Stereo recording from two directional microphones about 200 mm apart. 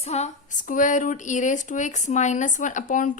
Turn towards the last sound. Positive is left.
turn(degrees=40)  # may be behind; listen again after turning